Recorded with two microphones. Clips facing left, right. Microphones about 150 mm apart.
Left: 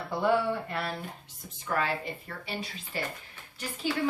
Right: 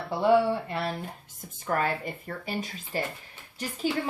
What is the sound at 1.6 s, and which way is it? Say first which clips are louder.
Speech: right 2 dB; 45° right (ahead or behind).